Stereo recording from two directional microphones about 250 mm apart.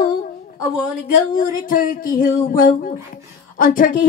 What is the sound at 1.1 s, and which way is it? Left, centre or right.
A woman's voice, left.